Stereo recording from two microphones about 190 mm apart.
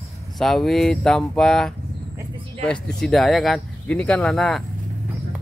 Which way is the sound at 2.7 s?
5° left (ahead or behind).